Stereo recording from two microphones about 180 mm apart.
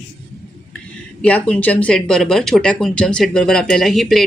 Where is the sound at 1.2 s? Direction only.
5° left (ahead or behind).